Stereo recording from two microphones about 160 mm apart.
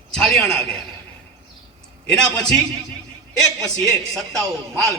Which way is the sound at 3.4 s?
5° left (ahead or behind).